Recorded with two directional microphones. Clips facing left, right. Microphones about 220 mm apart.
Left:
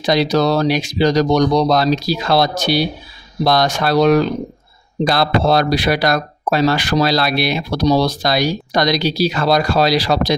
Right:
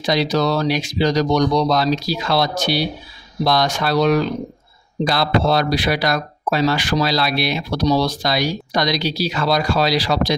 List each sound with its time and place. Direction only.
0.0 s speech: 45° left (ahead or behind)